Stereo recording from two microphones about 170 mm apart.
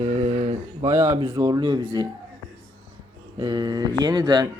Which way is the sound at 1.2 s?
25° right (ahead or behind).